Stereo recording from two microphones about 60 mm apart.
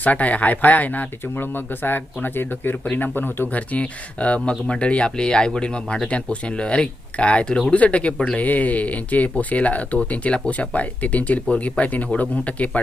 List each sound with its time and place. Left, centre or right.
0.0 s speech: left